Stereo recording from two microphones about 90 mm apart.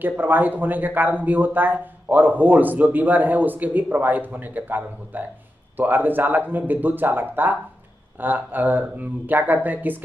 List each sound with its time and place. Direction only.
0.0 s speech: 20° right (ahead or behind)